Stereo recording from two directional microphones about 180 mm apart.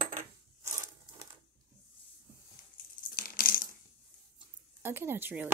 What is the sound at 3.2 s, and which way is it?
Coin, 50° left (ahead or behind).